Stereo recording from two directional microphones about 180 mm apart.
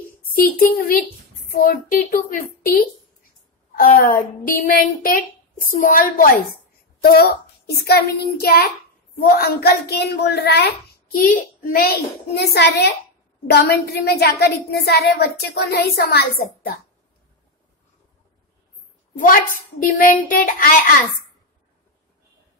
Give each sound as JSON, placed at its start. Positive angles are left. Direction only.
{"t": 0.4, "sound": "a woman's voice", "side_deg": 55}
{"t": 19.1, "sound": "a woman's voice", "side_deg": 50}